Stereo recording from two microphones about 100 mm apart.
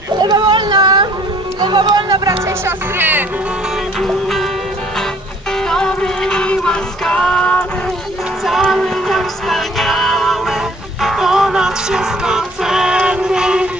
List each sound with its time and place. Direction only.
0.2 s a sound: 45° right (ahead or behind)
1.6 s speech: 45° right (ahead or behind)
2.4 s speech: 20° right (ahead or behind)
4.0 s music: centre (ahead or behind)
5.7 s music: 5° left (ahead or behind); by 13.7 s 10° right (ahead or behind)